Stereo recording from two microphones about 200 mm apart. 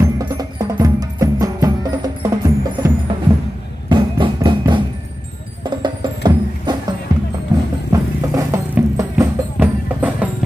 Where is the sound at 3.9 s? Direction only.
25° right (ahead or behind).